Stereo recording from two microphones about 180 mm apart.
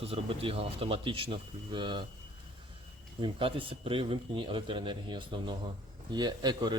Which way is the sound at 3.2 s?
30° right (ahead or behind).